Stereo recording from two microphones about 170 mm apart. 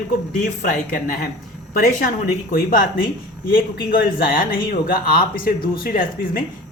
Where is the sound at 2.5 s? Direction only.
55° left (ahead or behind).